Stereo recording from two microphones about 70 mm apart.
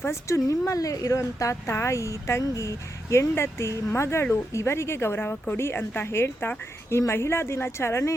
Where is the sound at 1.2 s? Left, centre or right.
Left.